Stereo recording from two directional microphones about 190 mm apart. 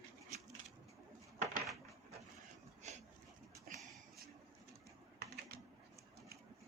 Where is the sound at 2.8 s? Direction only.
40° right (ahead or behind).